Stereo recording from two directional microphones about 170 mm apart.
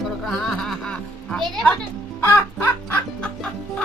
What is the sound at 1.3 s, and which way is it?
Speech, centre (ahead or behind).